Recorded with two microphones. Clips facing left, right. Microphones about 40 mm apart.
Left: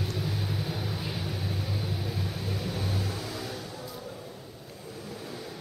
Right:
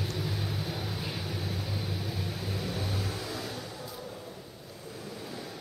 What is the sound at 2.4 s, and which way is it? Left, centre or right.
Vehicle, centre.